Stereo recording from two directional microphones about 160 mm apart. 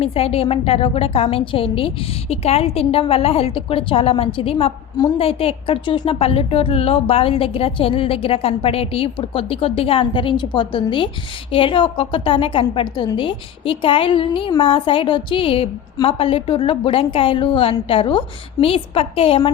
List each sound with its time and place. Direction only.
0.0 s a woman's voice: 35° left (ahead or behind)